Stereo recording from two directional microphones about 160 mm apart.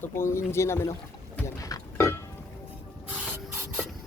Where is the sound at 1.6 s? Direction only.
20° left (ahead or behind).